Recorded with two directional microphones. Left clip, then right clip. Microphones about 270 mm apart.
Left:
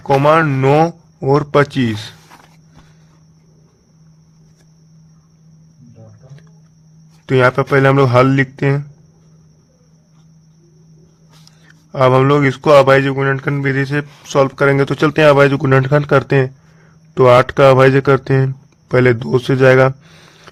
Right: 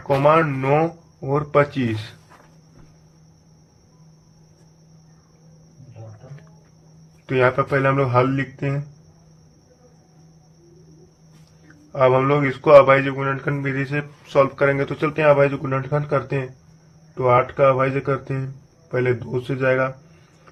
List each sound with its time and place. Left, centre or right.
0.2 s a man's voice: left
7.3 s a man's voice: left
11.9 s a man's voice: left